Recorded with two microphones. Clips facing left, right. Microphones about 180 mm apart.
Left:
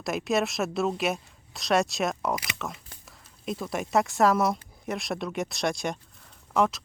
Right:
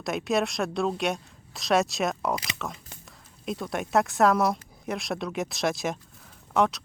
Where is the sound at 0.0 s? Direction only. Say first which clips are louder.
Even; centre (ahead or behind).